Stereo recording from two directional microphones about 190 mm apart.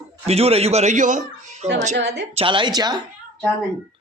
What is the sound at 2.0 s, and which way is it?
Speech, 60° right (ahead or behind).